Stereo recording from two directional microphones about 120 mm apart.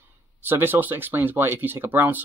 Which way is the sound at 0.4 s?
20° right (ahead or behind).